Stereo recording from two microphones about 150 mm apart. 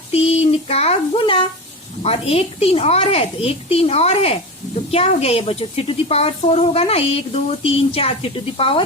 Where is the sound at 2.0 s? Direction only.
40° left (ahead or behind).